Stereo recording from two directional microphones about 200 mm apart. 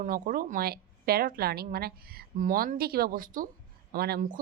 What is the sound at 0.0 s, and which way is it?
A woman's voice, 45° right (ahead or behind).